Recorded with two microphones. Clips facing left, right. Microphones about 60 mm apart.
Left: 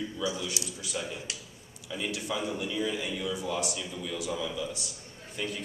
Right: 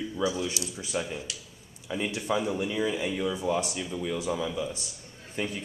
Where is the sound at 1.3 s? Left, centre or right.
Left.